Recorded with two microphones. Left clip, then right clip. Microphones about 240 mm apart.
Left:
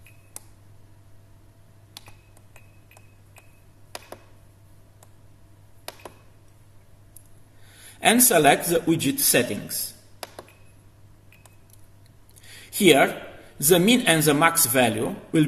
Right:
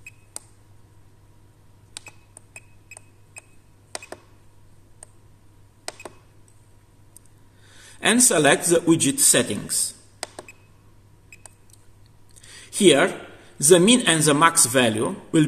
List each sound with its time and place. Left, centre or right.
7.6 s a sound: centre
8.6 s speech: centre
12.4 s a man's voice: centre